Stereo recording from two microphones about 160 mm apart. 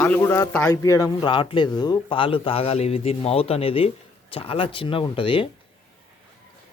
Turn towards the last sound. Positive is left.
turn(degrees=35)  # may be behind; listen again after turning